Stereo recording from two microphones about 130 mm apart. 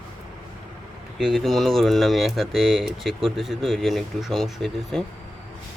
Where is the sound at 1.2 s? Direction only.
Centre (ahead or behind).